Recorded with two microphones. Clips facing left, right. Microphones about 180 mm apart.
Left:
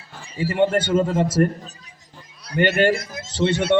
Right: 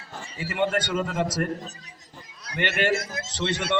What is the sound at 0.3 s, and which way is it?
A man's voice, 35° left (ahead or behind).